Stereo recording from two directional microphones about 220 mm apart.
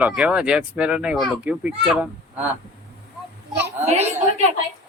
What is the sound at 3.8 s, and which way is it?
Speech, 30° right (ahead or behind).